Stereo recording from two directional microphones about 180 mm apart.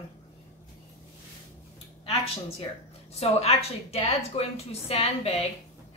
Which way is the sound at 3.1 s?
35° left (ahead or behind).